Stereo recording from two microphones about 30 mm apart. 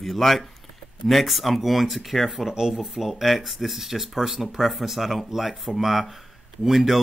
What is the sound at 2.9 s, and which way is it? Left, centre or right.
Speech, centre.